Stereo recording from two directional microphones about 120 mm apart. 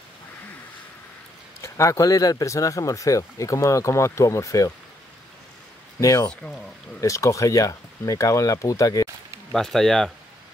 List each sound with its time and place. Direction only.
1.6 s speech: 25° left (ahead or behind)
5.9 s speech: 30° left (ahead or behind)
6.2 s speech: 5° left (ahead or behind)
7.0 s speech: 25° left (ahead or behind)
9.5 s speech: 5° left (ahead or behind)